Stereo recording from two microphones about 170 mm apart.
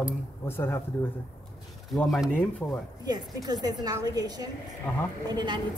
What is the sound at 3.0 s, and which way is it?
A woman's voice, 25° right (ahead or behind).